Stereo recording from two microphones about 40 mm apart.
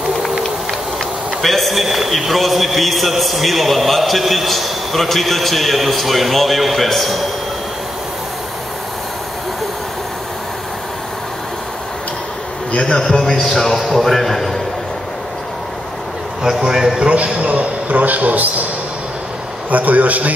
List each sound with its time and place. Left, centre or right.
1.4 s a man's voice: centre
12.9 s a man's voice: centre
13.2 s a man's voice: centre
16.4 s a man's voice: centre
17.0 s a man's voice: right
19.7 s a man's voice: right